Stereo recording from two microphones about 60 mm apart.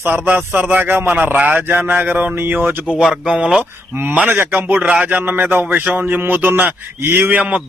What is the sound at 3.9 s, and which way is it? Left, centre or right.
A man's voice, right.